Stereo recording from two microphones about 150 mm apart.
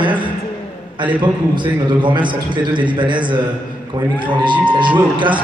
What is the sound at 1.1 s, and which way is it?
A man's voice, 35° right (ahead or behind).